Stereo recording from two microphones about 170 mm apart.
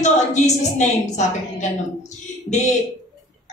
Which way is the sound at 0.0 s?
45° left (ahead or behind).